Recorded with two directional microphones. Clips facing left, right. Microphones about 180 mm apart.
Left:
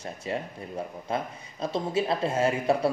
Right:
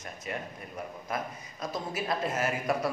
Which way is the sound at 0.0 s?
30° left (ahead or behind).